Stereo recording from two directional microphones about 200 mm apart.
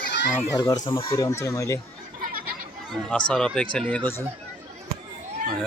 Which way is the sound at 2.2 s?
45° right (ahead or behind).